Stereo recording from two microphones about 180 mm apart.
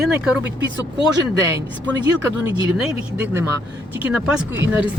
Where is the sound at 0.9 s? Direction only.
75° right (ahead or behind).